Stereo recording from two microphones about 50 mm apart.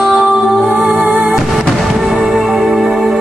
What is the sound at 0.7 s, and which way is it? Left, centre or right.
Music, right.